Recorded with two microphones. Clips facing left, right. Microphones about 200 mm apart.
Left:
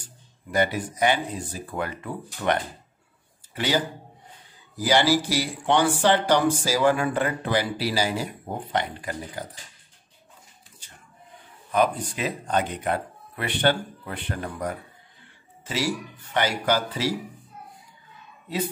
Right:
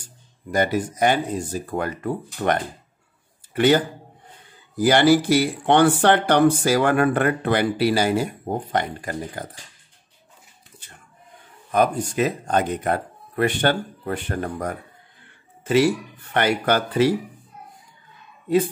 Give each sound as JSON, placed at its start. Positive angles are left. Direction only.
{"t": 0.0, "sound": "speech", "side_deg": -45}
{"t": 3.5, "sound": "speech", "side_deg": -55}
{"t": 11.7, "sound": "speech", "side_deg": -45}